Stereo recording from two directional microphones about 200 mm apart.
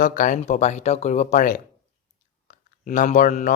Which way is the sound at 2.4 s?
40° left (ahead or behind).